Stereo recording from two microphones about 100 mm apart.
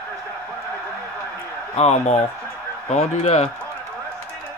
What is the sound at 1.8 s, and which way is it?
Speech, 90° left.